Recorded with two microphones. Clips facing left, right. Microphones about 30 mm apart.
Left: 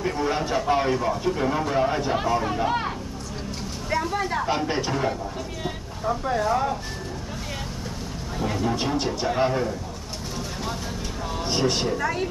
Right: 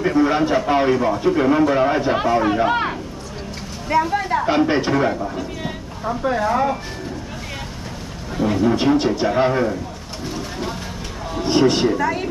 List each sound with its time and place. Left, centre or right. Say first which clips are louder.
0.0 s speech: right 8 dB; right
3.9 s speech: right 7 dB; centre
4.5 s speech: right 7 dB; right
6.2 s speech: right 6 dB; right
8.6 s speech: right 9 dB; right
11.3 s speech: right 8 dB; centre